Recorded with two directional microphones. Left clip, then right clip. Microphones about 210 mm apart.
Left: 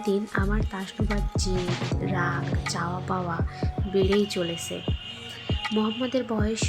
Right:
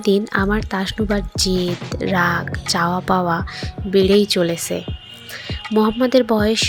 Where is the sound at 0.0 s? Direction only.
40° right (ahead or behind).